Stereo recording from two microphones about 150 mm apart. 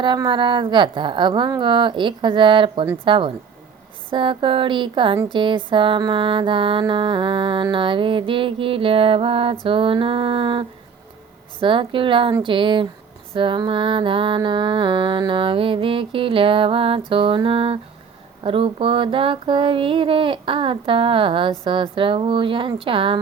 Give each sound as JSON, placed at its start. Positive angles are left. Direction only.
{"t": 0.0, "sound": "speech", "side_deg": -30}